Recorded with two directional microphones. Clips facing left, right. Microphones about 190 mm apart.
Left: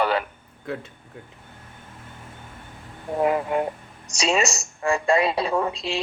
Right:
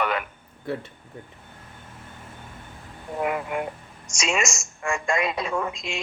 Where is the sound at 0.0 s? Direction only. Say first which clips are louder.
Left 4 dB; 30° left (ahead or behind).